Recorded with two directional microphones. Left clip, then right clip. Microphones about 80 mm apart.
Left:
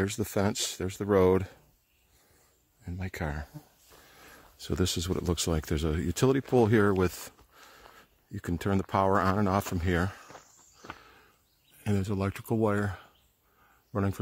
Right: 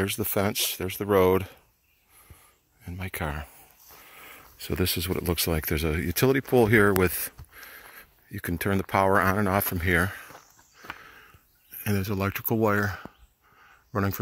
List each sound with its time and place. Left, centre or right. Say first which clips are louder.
0.0 s speech: right 3 dB; centre
2.8 s speech: right 4 dB; centre
4.1 s a sound: right 7 dB; left
4.6 s speech: right 3 dB; centre
11.0 s a sound: right 7 dB; centre
11.8 s speech: right 3 dB; centre